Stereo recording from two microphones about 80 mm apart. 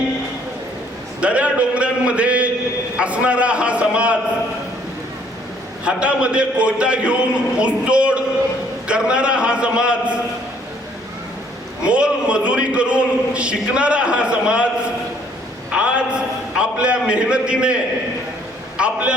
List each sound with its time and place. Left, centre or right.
1.2 s a man's voice: centre
5.8 s a man's voice: centre
11.8 s a man's voice: centre
15.7 s a sound: centre
18.8 s a man's voice: centre